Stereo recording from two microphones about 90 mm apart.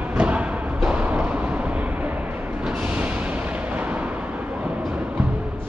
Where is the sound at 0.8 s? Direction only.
15° right (ahead or behind).